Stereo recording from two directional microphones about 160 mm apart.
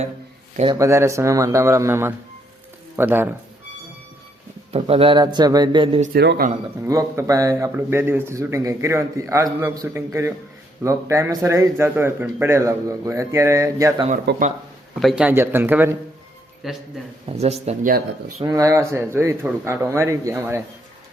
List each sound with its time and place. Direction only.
0.7 s speech: 20° right (ahead or behind)
4.7 s speech: 35° right (ahead or behind)
6.1 s speech: 85° right
6.8 s a man's voice: 20° right (ahead or behind)
14.3 s speech: 90° right
15.0 s a man's voice: 5° right (ahead or behind)
16.6 s a man's voice: centre (ahead or behind)
17.2 s speech: 40° right (ahead or behind)
18.4 s a man's voice: 20° right (ahead or behind)